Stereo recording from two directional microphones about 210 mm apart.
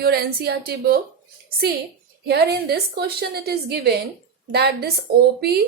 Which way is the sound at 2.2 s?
50° right (ahead or behind).